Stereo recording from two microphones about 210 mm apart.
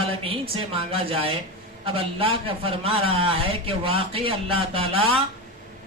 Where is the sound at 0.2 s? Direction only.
25° right (ahead or behind).